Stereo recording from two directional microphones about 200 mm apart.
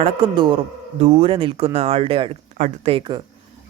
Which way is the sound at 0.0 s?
25° right (ahead or behind).